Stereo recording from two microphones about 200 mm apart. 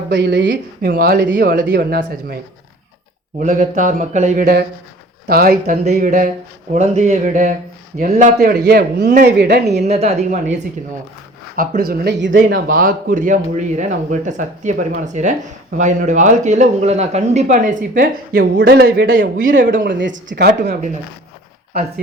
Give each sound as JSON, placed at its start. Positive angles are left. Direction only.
{"t": 0.1, "sound": "speech", "side_deg": -65}
{"t": 0.8, "sound": "a man's voice", "side_deg": -45}
{"t": 3.4, "sound": "a man's voice", "side_deg": -40}
{"t": 5.7, "sound": "a man's voice", "side_deg": -35}
{"t": 9.8, "sound": "speech", "side_deg": -30}
{"t": 11.5, "sound": "a man's voice", "side_deg": -45}
{"t": 12.5, "sound": "speech", "side_deg": -45}
{"t": 19.7, "sound": "speech", "side_deg": -65}
{"t": 20.3, "sound": "a man's voice", "side_deg": -50}